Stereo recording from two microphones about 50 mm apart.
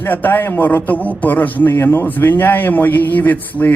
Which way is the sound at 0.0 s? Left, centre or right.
Left.